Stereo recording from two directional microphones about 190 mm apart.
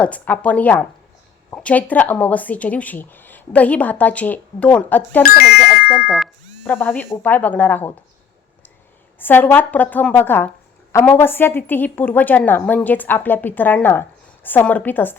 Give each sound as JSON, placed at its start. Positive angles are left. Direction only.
{"t": 0.0, "sound": "speech", "side_deg": 5}
{"t": 5.4, "sound": "doorbell", "side_deg": 50}
{"t": 6.7, "sound": "speech", "side_deg": 10}
{"t": 9.1, "sound": "speech", "side_deg": 10}